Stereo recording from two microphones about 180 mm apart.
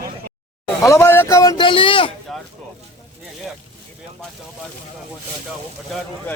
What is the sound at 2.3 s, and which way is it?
Speech, centre (ahead or behind).